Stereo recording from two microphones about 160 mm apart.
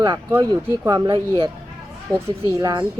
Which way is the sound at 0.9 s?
25° right (ahead or behind).